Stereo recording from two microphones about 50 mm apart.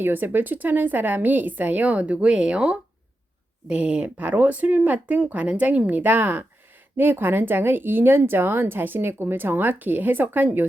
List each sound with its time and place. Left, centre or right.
0.0 s a woman's voice: right